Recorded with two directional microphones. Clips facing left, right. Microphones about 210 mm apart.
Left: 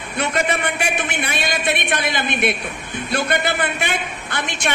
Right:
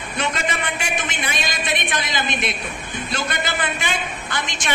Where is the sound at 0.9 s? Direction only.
60° left (ahead or behind).